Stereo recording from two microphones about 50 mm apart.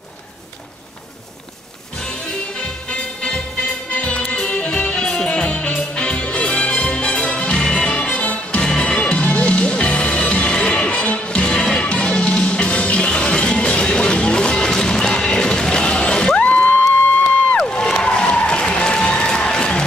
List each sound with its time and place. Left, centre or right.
2.0 s music: centre
17.6 s crowd: centre